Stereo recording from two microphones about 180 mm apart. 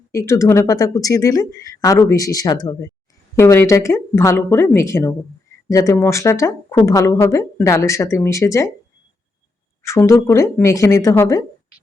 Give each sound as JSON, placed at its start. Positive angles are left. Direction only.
{"t": 0.1, "sound": "speech", "side_deg": 15}
{"t": 9.8, "sound": "speech", "side_deg": 15}